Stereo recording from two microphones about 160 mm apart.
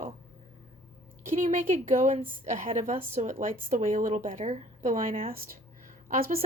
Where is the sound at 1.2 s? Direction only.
55° right (ahead or behind).